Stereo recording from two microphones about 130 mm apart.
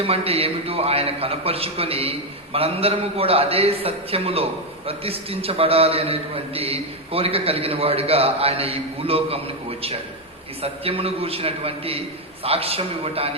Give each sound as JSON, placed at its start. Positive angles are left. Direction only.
{"t": 0.0, "sound": "a man's voice", "side_deg": -50}